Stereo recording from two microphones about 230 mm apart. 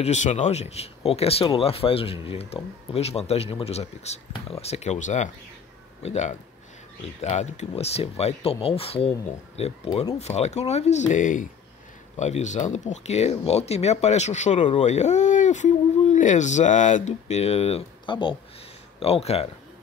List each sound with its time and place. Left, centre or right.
0.0 s speech: left